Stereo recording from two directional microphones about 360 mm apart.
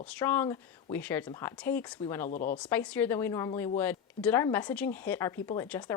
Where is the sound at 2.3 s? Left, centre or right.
Left.